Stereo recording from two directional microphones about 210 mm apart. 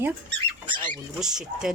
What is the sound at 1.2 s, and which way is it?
Speech, 5° right (ahead or behind).